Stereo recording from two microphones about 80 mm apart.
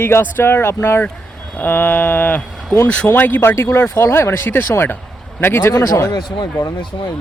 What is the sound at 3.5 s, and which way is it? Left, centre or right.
Speech, left.